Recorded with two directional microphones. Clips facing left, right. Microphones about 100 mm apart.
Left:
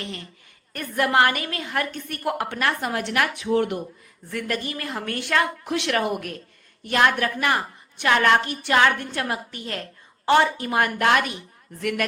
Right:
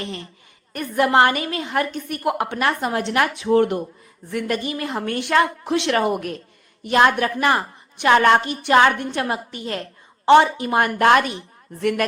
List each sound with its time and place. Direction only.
0.0 s a woman's voice: 30° right (ahead or behind)
3.5 s speech: 40° right (ahead or behind)
4.3 s a woman's voice: 20° right (ahead or behind)